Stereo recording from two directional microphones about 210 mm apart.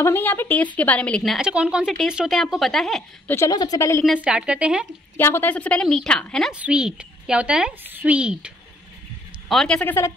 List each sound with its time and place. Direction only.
0.0 s a woman's voice: 10° left (ahead or behind)
3.3 s a woman's voice: 15° left (ahead or behind)
4.0 s a woman's voice: 5° right (ahead or behind)
5.1 s a woman's voice: 10° left (ahead or behind); by 8.5 s 5° right (ahead or behind)
9.5 s a woman's voice: 5° left (ahead or behind)